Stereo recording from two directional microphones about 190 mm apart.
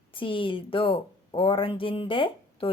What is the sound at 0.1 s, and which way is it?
Speech, 25° left (ahead or behind).